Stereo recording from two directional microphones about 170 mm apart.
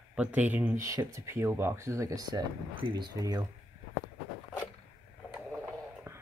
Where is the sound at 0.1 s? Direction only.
5° right (ahead or behind); by 3.4 s 20° right (ahead or behind).